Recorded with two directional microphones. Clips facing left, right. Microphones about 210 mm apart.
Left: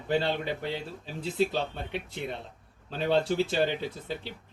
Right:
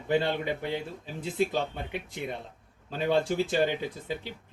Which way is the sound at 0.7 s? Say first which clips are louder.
Right 2 dB; 50° right (ahead or behind).